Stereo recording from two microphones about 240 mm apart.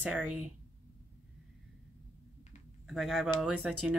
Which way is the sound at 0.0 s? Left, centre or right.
Centre.